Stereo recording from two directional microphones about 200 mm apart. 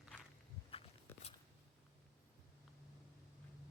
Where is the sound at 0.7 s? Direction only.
30° left (ahead or behind).